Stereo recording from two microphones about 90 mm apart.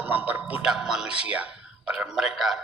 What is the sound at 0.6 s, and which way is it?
Speech, 5° right (ahead or behind).